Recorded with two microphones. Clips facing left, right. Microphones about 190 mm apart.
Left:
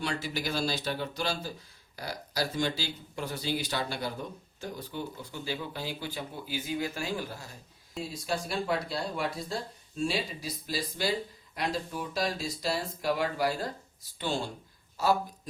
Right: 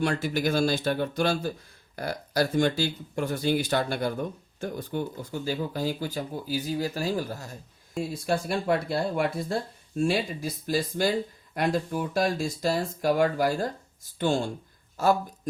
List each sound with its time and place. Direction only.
0.0 s speech: 50° right (ahead or behind)
8.1 s speech: 55° right (ahead or behind)